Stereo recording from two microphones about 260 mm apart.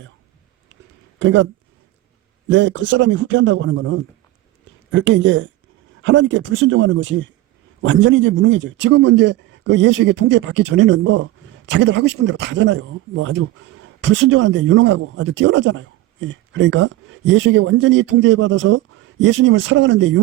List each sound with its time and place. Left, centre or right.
1.2 s a man's voice: right
2.5 s a man's voice: right